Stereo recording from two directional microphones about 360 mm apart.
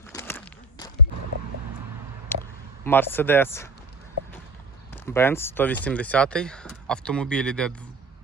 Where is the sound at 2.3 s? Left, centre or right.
Centre.